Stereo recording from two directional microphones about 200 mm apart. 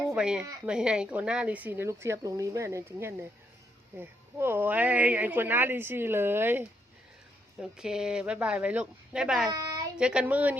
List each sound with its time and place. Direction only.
0.1 s speech: 5° right (ahead or behind)
9.5 s a sound: 20° right (ahead or behind)
10.0 s speech: 5° right (ahead or behind)